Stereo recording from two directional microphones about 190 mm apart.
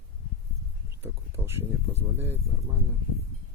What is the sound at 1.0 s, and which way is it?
Speech, 15° right (ahead or behind).